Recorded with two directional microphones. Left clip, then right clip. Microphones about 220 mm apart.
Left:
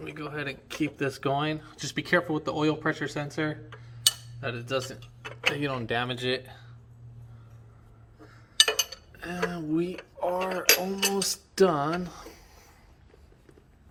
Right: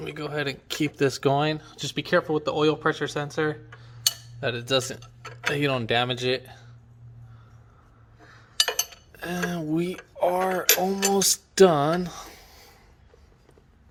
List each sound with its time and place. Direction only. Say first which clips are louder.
0.0 s speech: right 5 dB; 35° right (ahead or behind); by 3.6 s 10° right (ahead or behind)
4.4 s speech: right 6 dB; 35° right (ahead or behind)
9.2 s speech: right 2 dB; 40° right (ahead or behind)